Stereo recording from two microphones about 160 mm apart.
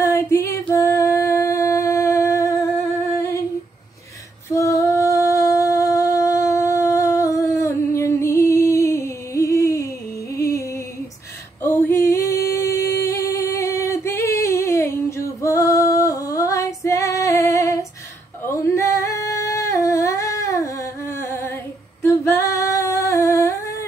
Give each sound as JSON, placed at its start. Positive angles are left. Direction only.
{"t": 0.0, "sound": "music", "side_deg": 15}
{"t": 3.2, "sound": "humming", "side_deg": 20}
{"t": 4.6, "sound": "music", "side_deg": 20}
{"t": 11.6, "sound": "singing", "side_deg": 15}